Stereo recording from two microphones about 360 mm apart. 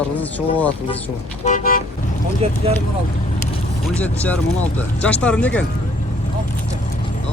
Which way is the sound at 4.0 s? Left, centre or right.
Centre.